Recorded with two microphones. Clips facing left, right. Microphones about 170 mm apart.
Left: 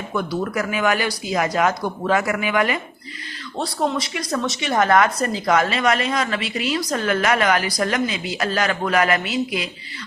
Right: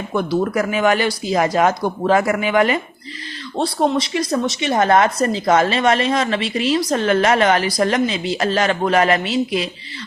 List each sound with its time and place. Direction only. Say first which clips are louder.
0.1 s a woman's voice: right 5 dB; 35° right (ahead or behind)